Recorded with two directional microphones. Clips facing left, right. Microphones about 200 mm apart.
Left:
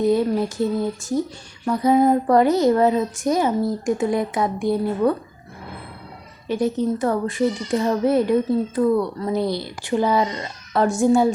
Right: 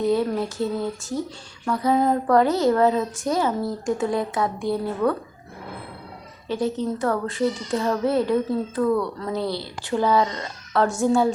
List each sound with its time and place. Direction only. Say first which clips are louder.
0.0 s speech: left 3 dB; 15° left (ahead or behind)
6.5 s speech: left 3 dB; 15° left (ahead or behind)